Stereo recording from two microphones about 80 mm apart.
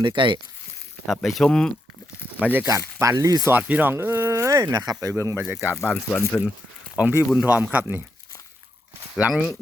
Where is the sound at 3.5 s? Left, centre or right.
Centre; by 5.1 s right.